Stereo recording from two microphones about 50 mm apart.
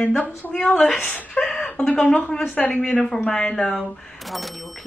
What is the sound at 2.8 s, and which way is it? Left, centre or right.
Speech, centre.